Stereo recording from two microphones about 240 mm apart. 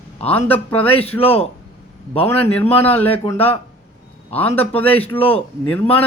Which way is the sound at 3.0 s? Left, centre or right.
Centre.